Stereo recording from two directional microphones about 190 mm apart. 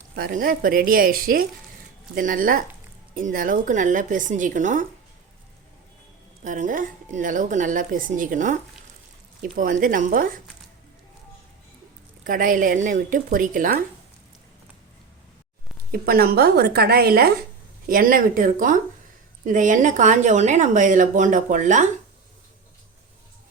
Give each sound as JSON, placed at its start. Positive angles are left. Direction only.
{"t": 0.2, "sound": "speech", "side_deg": -50}
{"t": 6.4, "sound": "speech", "side_deg": -40}
{"t": 12.2, "sound": "speech", "side_deg": -45}
{"t": 15.9, "sound": "a woman's voice", "side_deg": -50}